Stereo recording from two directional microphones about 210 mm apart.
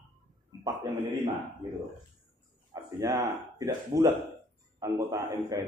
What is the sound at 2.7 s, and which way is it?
A man's voice, 15° right (ahead or behind).